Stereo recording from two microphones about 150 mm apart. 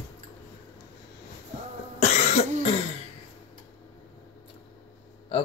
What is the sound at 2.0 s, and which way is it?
Cough, 55° left (ahead or behind).